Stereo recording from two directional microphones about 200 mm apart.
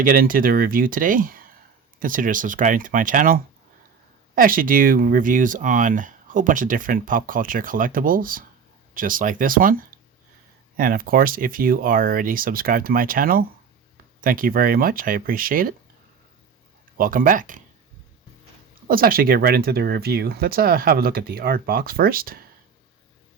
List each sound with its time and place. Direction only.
0.0 s speech: 45° right (ahead or behind)
10.8 s speech: 45° right (ahead or behind)
17.0 s speech: 45° right (ahead or behind)
18.9 s speech: 45° right (ahead or behind)